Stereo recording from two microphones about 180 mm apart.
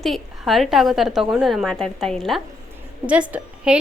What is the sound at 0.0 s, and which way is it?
A woman's voice, centre (ahead or behind).